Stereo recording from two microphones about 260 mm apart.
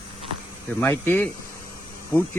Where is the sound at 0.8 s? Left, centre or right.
Centre.